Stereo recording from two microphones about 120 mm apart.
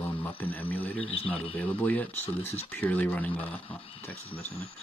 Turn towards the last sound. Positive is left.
turn(degrees=10)  # may be behind; listen again after turning